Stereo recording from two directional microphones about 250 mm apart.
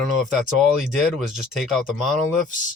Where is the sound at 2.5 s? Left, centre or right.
Left.